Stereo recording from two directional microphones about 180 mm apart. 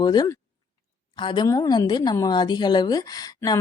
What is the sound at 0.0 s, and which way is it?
A woman's voice, 20° left (ahead or behind).